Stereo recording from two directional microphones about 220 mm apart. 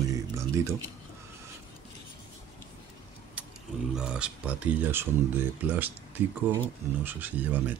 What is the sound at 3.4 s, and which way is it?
Roaring cats, 5° right (ahead or behind).